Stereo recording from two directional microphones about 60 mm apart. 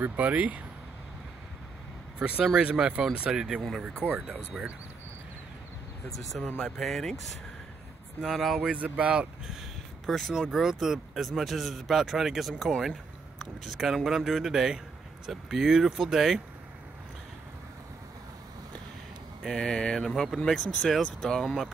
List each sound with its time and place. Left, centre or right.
0.0 s speech: right
2.1 s speech: right
6.4 s mantra: centre
8.2 s speech: centre
8.5 s speech: right
10.0 s speech: centre
19.4 s mantra: centre
20.4 s speech: centre